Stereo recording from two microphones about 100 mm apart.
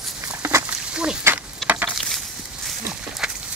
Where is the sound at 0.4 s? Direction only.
25° right (ahead or behind).